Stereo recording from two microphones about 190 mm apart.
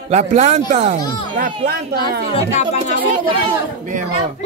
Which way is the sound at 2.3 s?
35° left (ahead or behind).